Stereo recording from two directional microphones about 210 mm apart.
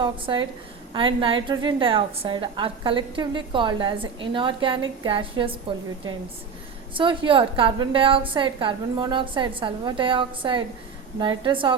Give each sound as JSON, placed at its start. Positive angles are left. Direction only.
{"t": 0.0, "sound": "a woman's voice", "side_deg": -20}
{"t": 6.9, "sound": "a woman's voice", "side_deg": -25}